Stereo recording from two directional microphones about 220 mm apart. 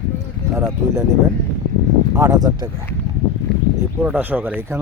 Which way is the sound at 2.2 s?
15° right (ahead or behind).